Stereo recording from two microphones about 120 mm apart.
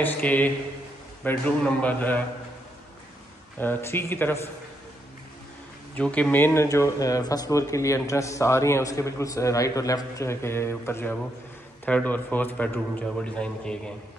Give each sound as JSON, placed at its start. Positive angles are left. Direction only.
{"t": 0.0, "sound": "a man's voice", "side_deg": 15}
{"t": 3.5, "sound": "speech", "side_deg": 20}
{"t": 5.9, "sound": "a man's voice", "side_deg": 10}